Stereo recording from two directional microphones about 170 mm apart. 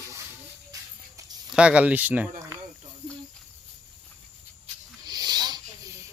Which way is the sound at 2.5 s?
20° right (ahead or behind).